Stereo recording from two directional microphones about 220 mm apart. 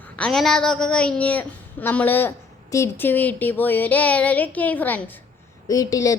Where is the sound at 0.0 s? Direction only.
5° left (ahead or behind).